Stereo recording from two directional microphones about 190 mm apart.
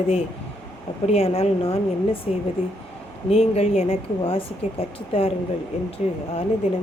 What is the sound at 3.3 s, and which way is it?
Speech, 35° left (ahead or behind).